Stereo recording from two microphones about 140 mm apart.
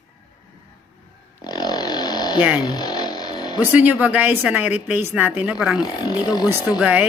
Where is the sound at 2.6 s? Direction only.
30° left (ahead or behind).